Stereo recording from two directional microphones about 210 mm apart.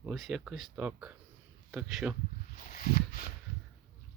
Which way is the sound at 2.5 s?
40° left (ahead or behind).